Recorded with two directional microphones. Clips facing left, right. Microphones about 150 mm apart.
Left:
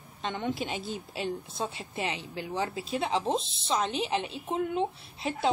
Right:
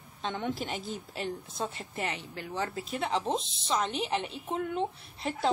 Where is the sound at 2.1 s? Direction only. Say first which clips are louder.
Left 3 dB; 20° left (ahead or behind).